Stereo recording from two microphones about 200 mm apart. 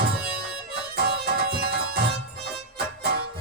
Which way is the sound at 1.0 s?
50° right (ahead or behind).